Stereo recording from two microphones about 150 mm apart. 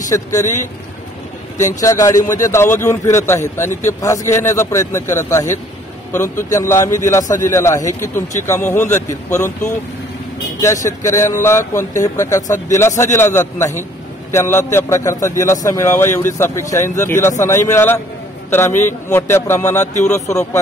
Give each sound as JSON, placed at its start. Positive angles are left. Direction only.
{"t": 0.1, "sound": "a man's voice", "side_deg": 20}
{"t": 1.6, "sound": "a man's voice", "side_deg": 20}
{"t": 6.5, "sound": "a man's voice", "side_deg": 20}
{"t": 10.6, "sound": "a man's voice", "side_deg": 20}
{"t": 19.8, "sound": "speech", "side_deg": 50}
{"t": 20.2, "sound": "a man's voice", "side_deg": 20}